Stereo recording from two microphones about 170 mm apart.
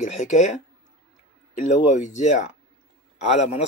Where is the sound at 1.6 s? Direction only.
45° left (ahead or behind).